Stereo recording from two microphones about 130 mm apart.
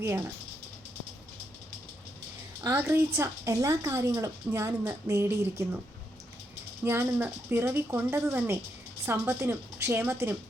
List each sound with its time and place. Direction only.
2.6 s speech: 20° right (ahead or behind)
6.8 s a woman's voice: 20° right (ahead or behind)